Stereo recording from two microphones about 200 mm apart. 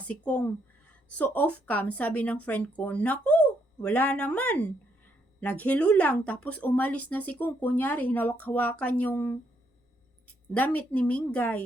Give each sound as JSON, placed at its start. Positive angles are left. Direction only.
{"t": 0.0, "sound": "speech", "side_deg": 5}